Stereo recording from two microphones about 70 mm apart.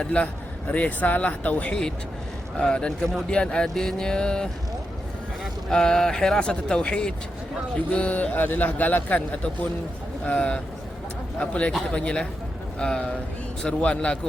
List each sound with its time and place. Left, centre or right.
0.0 s speech: centre
5.6 s speech: centre